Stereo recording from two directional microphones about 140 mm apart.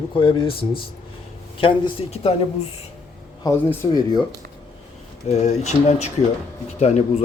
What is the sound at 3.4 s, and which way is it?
Speech, 20° left (ahead or behind).